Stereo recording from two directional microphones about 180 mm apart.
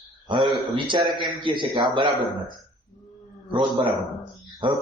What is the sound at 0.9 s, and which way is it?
Speech, 30° right (ahead or behind).